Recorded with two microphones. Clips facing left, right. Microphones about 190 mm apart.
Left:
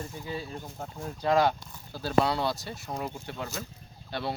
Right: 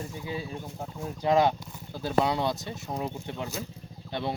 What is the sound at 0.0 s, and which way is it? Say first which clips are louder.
Speech: right 1 dB; 10° right (ahead or behind).